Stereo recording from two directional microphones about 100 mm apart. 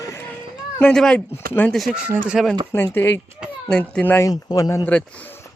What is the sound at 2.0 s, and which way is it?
Speech, 10° right (ahead or behind).